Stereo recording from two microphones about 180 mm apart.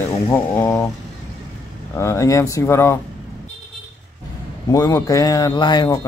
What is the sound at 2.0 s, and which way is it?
A man's voice, 15° left (ahead or behind).